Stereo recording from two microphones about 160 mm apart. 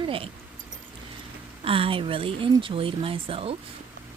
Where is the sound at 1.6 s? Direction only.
35° right (ahead or behind).